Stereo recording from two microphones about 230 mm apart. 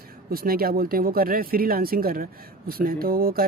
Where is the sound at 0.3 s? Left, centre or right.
Right.